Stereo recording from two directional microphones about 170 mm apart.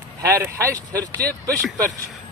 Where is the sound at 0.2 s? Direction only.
15° right (ahead or behind).